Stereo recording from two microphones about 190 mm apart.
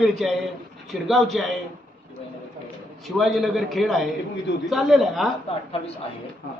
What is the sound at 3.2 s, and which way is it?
A man's voice, centre (ahead or behind).